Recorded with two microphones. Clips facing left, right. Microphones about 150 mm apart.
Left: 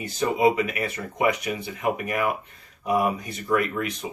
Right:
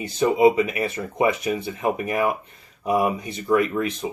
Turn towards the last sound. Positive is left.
turn(degrees=-25)  # may be behind; listen again after turning